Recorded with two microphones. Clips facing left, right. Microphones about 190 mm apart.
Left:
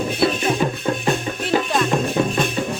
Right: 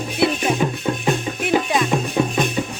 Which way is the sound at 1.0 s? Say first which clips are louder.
Right 1 dB; 15° right (ahead or behind).